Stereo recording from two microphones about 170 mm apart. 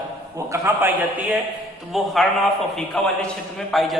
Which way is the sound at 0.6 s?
10° right (ahead or behind).